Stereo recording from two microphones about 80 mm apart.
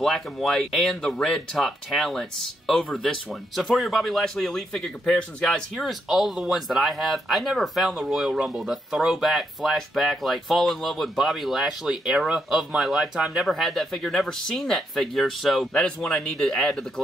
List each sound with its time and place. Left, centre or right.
0.0 s speech: centre